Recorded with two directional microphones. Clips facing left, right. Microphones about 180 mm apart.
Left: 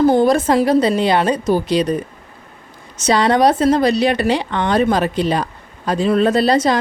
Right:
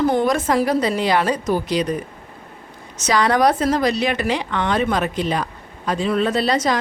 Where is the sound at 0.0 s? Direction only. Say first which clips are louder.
Left 5 dB; 30° left (ahead or behind).